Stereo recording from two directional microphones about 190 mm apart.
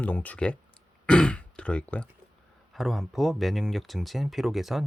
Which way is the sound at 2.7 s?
Centre (ahead or behind).